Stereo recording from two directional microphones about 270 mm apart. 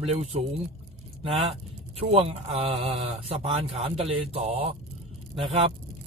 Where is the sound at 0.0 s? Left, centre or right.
Right.